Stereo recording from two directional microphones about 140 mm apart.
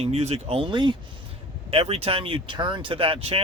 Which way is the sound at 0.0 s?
50° right (ahead or behind).